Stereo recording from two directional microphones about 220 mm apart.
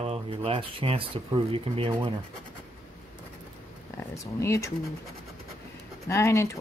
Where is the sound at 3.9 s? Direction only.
15° left (ahead or behind).